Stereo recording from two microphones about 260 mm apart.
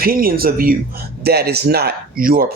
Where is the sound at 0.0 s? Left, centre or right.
Right.